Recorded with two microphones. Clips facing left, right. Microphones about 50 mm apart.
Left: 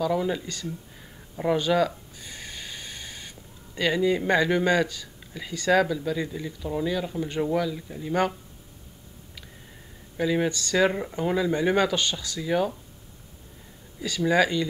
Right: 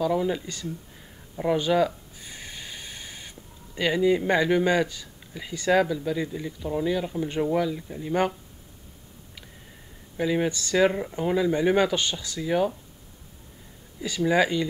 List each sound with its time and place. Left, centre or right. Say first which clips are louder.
0.0 s speech: right 1 dB; centre
1.6 s wheeze: even; centre
4.3 s speech: even; centre
10.1 s speech: even; centre
10.9 s speech: even; centre
14.0 s speech: even; centre